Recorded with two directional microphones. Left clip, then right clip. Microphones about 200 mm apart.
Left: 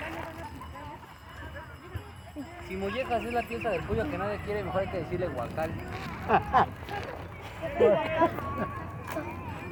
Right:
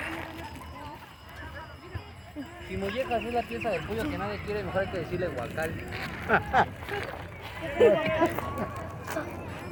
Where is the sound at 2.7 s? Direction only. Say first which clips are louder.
Right 1 dB; 45° left (ahead or behind).